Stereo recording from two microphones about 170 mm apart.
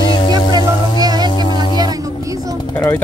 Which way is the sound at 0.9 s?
25° right (ahead or behind).